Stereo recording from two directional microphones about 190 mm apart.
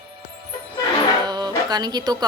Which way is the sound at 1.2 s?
20° right (ahead or behind).